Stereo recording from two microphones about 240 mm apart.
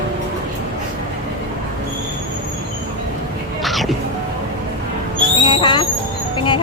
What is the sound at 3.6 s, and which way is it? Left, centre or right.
Music, centre.